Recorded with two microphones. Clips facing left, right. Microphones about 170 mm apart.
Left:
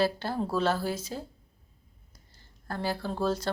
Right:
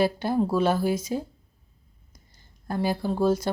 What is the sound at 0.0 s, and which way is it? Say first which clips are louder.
Speech: right 5 dB; 15° right (ahead or behind).